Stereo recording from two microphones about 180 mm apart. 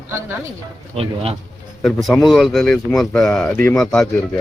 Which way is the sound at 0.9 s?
35° right (ahead or behind).